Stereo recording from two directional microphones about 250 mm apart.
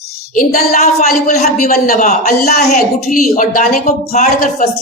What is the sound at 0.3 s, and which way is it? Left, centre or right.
A man's voice, left.